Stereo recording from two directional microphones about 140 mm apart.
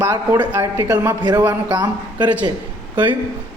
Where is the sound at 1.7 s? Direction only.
30° right (ahead or behind).